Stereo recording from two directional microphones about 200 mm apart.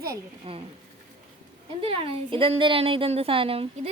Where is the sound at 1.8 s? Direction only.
30° right (ahead or behind).